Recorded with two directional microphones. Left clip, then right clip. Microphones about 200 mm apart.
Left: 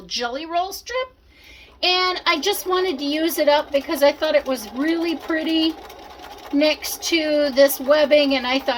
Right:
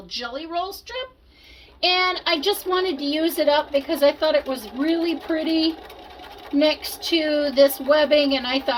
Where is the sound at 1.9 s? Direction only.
35° left (ahead or behind).